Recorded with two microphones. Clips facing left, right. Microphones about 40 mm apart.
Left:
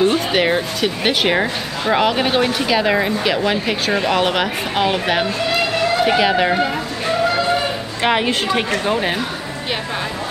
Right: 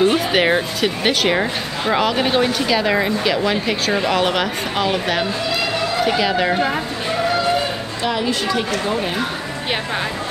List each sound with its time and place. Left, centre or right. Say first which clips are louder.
0.0 s speech: even; centre
8.0 s a woman's voice: left 4 dB; left